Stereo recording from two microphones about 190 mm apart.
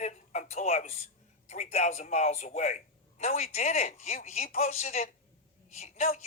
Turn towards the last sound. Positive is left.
turn(degrees=35)  # may be behind; listen again after turning